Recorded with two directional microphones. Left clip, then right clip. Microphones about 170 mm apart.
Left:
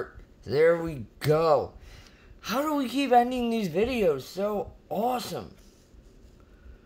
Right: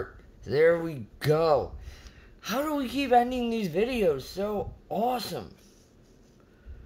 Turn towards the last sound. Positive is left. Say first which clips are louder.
# even
turn(degrees=0)  # may be behind; listen again after turning